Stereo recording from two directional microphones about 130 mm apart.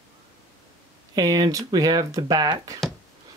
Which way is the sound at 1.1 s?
30° right (ahead or behind).